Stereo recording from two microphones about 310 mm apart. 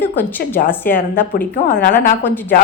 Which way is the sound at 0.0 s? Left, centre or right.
Centre.